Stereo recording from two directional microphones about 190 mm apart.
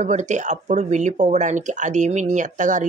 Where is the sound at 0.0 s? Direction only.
40° right (ahead or behind).